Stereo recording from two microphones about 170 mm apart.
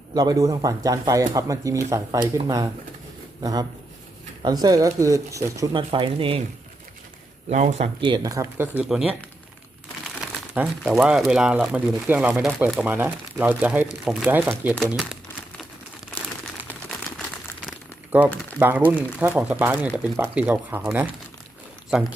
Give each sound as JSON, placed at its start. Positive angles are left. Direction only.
{"t": 0.1, "sound": "speech", "side_deg": -25}
{"t": 7.5, "sound": "speech", "side_deg": -45}
{"t": 8.0, "sound": "speech", "side_deg": -25}
{"t": 10.5, "sound": "speech", "side_deg": -10}
{"t": 18.6, "sound": "speech", "side_deg": -10}